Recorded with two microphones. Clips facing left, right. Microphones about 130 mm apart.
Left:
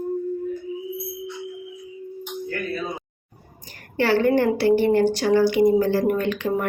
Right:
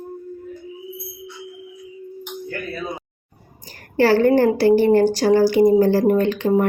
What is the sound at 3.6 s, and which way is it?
A woman's voice, 35° right (ahead or behind).